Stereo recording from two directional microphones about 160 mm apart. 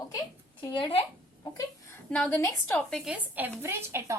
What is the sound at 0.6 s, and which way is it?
Speech, 30° left (ahead or behind).